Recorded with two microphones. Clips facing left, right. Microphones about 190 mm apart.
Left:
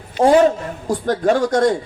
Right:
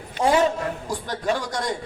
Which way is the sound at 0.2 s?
50° left (ahead or behind).